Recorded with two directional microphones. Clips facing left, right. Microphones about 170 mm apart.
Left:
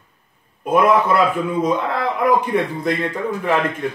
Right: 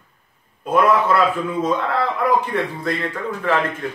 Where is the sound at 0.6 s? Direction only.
15° left (ahead or behind).